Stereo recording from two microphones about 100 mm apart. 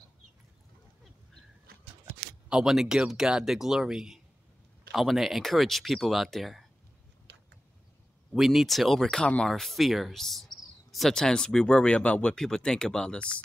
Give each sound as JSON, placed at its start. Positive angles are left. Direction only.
{"t": 2.5, "sound": "speech", "side_deg": -5}
{"t": 8.3, "sound": "speech", "side_deg": 0}